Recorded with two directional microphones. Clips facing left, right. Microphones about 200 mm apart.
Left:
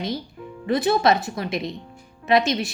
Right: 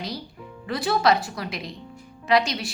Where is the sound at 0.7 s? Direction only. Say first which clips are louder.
Left 3 dB; 20° left (ahead or behind).